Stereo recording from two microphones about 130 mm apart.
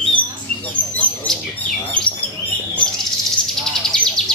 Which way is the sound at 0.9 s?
5° left (ahead or behind).